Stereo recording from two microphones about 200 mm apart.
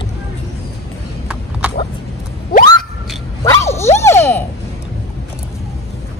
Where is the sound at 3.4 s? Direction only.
15° left (ahead or behind).